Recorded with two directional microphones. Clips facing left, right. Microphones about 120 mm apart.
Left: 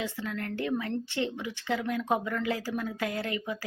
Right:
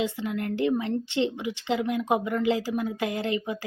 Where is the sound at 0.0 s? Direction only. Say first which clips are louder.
Right 6 dB; 20° right (ahead or behind).